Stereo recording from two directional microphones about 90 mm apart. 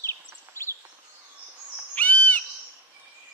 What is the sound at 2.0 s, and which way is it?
Owl, 15° left (ahead or behind).